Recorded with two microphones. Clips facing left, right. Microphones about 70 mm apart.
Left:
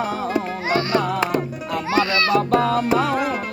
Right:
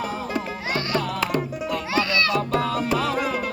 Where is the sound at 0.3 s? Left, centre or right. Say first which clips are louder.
Left 7 dB; left.